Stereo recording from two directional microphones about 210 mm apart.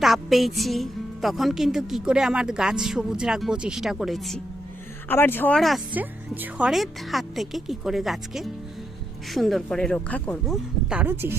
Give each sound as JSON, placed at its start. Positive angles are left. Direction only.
{"t": 0.0, "sound": "a woman's voice", "side_deg": 0}
{"t": 5.0, "sound": "a woman's voice", "side_deg": 10}